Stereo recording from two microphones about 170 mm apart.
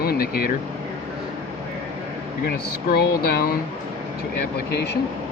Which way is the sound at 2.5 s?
65° left (ahead or behind).